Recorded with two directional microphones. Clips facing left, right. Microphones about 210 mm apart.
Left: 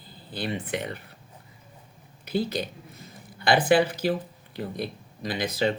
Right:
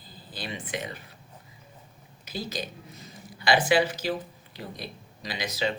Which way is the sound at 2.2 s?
60° left (ahead or behind).